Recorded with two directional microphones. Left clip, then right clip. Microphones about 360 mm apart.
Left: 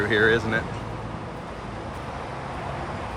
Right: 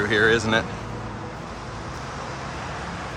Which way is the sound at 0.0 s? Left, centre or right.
Centre.